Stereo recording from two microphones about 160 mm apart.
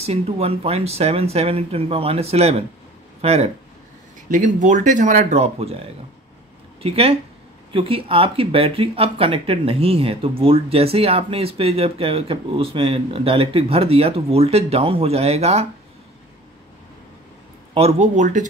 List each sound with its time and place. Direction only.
0.0 s speech: 40° right (ahead or behind)
4.3 s speech: 50° right (ahead or behind)
6.8 s speech: 40° right (ahead or behind)
17.7 s speech: 45° right (ahead or behind)